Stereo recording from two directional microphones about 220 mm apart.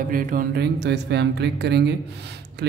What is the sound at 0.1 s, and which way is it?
Speech, 40° right (ahead or behind).